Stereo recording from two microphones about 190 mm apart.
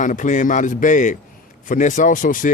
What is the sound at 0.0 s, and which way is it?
A man's voice, 40° left (ahead or behind).